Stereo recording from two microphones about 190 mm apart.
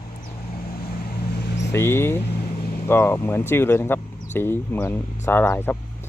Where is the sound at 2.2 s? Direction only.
50° left (ahead or behind).